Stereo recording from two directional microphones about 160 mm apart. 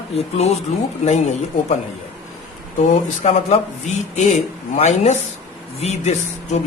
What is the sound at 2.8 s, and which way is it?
Speech, 45° left (ahead or behind).